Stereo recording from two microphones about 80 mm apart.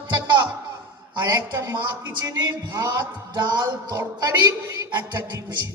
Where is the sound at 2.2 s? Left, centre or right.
Right.